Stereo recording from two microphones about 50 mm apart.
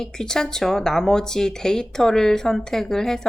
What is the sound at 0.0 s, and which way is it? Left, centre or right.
Speech, centre.